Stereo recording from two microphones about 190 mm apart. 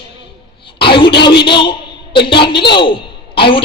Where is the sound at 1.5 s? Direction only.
25° left (ahead or behind).